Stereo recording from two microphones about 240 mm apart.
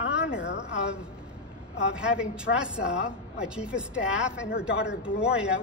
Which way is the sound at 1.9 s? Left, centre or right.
Centre.